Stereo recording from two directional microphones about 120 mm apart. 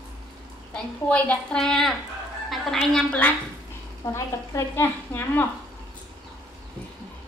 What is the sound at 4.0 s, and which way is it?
Speech, 25° left (ahead or behind).